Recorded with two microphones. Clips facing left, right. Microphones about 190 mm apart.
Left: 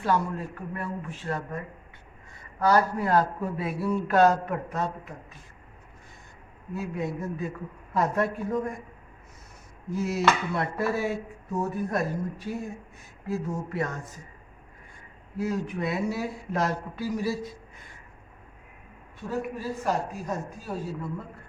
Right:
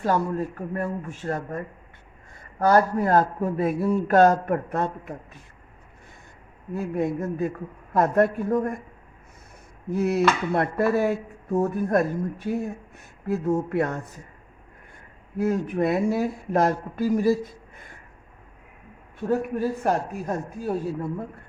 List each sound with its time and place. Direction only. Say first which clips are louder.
0.0 s a man's voice: right 3 dB; 45° right (ahead or behind)
6.7 s a man's voice: right 6 dB; 50° right (ahead or behind)
9.9 s a sound: right 4 dB; 60° right (ahead or behind)
13.0 s speech: right 4 dB; 60° right (ahead or behind)
15.4 s a man's voice: right 6 dB; 55° right (ahead or behind)
19.3 s a sound: right 7 dB; 55° right (ahead or behind)